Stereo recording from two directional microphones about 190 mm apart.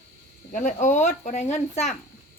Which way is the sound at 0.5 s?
40° left (ahead or behind).